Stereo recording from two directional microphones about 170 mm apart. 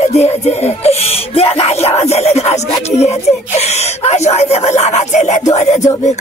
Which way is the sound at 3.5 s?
40° left (ahead or behind).